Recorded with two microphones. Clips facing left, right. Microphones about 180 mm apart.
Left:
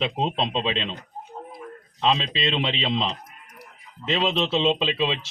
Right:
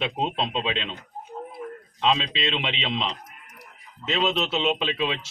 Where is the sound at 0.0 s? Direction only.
30° left (ahead or behind).